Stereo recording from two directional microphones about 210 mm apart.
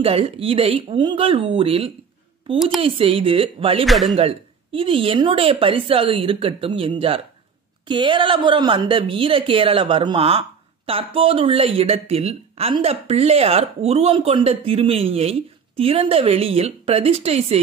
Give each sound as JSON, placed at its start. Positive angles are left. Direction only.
{"t": 0.0, "sound": "a woman's voice", "side_deg": -30}
{"t": 3.8, "sound": "speech", "side_deg": 0}
{"t": 4.2, "sound": "a woman's voice", "side_deg": -25}